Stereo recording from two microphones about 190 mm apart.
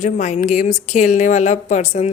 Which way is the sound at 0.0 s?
40° left (ahead or behind).